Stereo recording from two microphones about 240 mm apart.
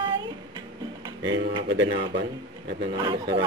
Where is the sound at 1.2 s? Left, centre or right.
Right.